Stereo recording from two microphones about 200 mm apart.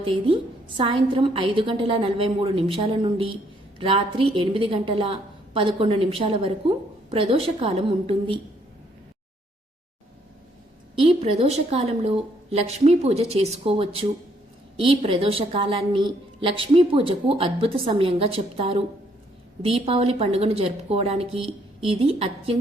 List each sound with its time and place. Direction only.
0.8 s a woman's voice: 25° right (ahead or behind)
10.9 s a woman's voice: 30° right (ahead or behind)